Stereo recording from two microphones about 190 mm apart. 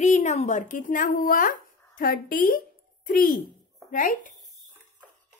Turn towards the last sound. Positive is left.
turn(degrees=40)  # may be behind; listen again after turning